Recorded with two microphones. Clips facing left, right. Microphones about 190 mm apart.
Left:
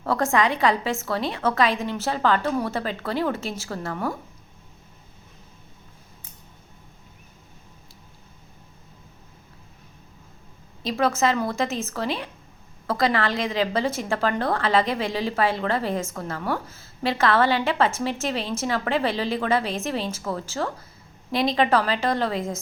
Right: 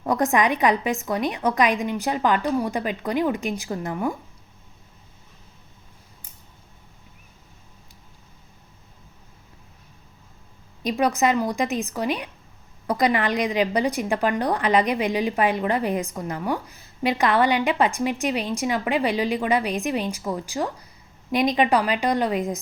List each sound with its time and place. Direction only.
0.0 s a woman's voice: 15° right (ahead or behind)
10.8 s a woman's voice: 15° right (ahead or behind)